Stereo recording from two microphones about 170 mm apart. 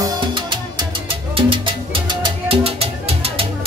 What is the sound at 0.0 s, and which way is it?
Music, 25° right (ahead or behind).